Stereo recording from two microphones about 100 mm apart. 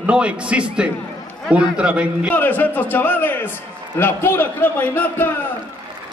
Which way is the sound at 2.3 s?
20° left (ahead or behind).